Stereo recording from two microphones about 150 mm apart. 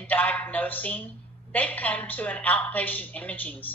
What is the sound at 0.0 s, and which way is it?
A man's voice, 10° left (ahead or behind).